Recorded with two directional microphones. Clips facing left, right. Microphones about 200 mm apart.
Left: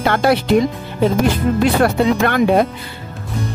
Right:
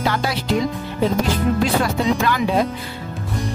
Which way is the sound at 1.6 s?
60° left (ahead or behind).